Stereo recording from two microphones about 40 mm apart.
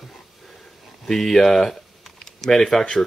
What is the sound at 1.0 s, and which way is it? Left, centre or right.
Speech, centre.